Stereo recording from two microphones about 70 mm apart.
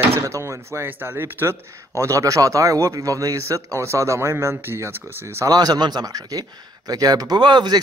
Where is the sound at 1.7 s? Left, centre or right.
Right.